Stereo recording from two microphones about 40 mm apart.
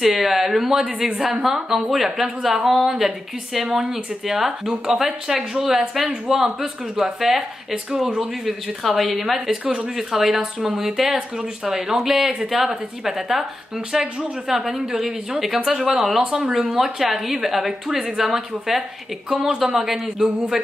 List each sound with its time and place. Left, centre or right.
0.0 s a woman's voice: centre
7.7 s speech: centre
8.5 s a woman's voice: centre